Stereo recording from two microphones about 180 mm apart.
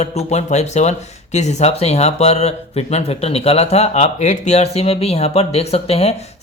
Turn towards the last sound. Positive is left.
turn(degrees=35)  # may be behind; listen again after turning